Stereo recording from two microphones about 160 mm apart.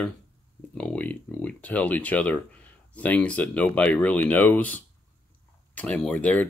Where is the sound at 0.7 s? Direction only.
10° left (ahead or behind).